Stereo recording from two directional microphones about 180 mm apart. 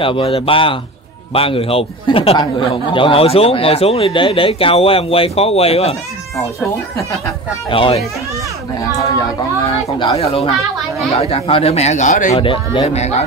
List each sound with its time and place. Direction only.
0.0 s speech: 30° left (ahead or behind)
7.7 s speech: 30° left (ahead or behind)
9.7 s speech: 30° left (ahead or behind)
12.4 s speech: 30° left (ahead or behind)